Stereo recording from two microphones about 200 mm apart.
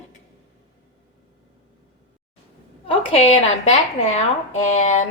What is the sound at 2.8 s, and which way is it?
Speech, 30° left (ahead or behind).